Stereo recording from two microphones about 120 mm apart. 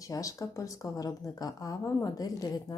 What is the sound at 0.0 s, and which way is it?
Speech, 30° left (ahead or behind).